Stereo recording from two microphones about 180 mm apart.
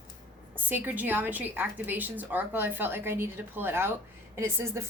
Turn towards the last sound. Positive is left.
turn(degrees=-15)  # may be behind; listen again after turning